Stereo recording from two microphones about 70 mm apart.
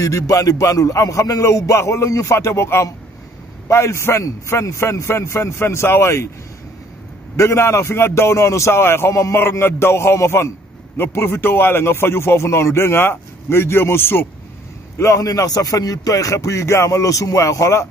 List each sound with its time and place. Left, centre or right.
0.0 s a man's voice: left
7.3 s speech: left
15.0 s a man's voice: left